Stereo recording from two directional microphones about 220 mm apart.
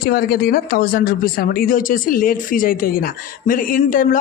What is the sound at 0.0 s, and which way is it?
Speech, 45° left (ahead or behind).